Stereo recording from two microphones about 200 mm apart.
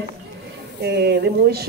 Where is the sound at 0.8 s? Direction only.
55° right (ahead or behind).